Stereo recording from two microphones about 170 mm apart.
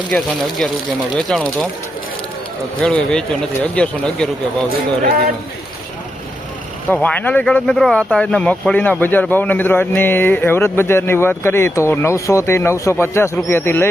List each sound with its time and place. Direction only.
0.1 s speech: centre (ahead or behind)
2.8 s speech: 5° left (ahead or behind)
5.0 s a man's voice: 60° right (ahead or behind)
6.9 s speech: 10° left (ahead or behind)